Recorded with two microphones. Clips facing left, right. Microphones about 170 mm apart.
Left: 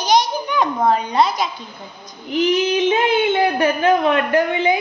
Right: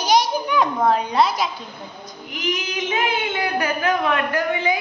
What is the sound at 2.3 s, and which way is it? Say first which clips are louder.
A woman's voice: left 10 dB; 30° left (ahead or behind).